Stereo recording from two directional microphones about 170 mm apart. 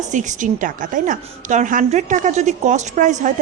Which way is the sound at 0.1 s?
45° right (ahead or behind).